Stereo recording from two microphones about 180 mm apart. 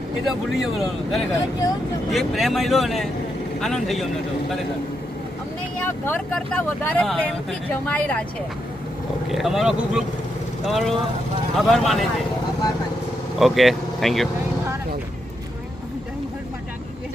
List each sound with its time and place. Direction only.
0.3 s speech: centre (ahead or behind)
5.8 s speech: 10° left (ahead or behind)
9.3 s speech: centre (ahead or behind)
13.4 s speech: centre (ahead or behind)